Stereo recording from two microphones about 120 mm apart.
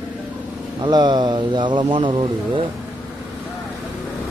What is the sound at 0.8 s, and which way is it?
Speech, 40° right (ahead or behind).